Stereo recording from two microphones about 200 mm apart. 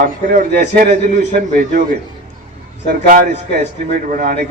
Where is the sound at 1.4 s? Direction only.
40° right (ahead or behind).